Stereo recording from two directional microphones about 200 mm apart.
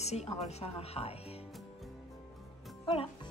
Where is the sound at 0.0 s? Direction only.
35° left (ahead or behind).